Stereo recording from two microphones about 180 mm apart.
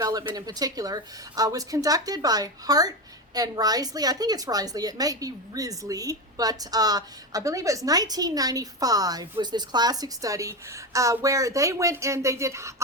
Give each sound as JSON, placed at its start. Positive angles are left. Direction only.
{"t": 0.0, "sound": "a woman's voice", "side_deg": -20}